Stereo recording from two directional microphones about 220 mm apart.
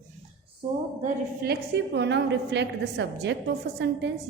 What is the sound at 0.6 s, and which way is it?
Speech, 20° right (ahead or behind).